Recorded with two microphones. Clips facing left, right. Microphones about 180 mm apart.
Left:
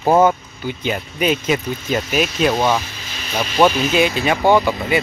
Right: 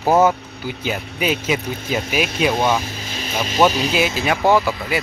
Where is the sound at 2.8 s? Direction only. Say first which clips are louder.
Right 5 dB; 40° right (ahead or behind).